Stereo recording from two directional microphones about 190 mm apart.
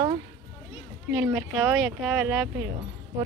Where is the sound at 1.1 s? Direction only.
15° right (ahead or behind).